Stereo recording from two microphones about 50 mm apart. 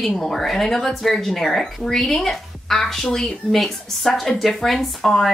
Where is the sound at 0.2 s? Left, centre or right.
Centre.